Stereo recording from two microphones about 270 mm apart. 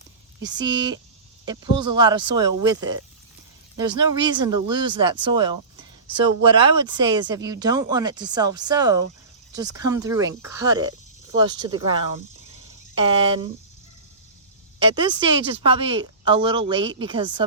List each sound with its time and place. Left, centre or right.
0.3 s speech: centre
14.8 s speech: centre